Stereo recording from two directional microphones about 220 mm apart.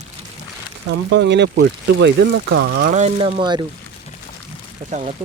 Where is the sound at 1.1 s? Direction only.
55° right (ahead or behind).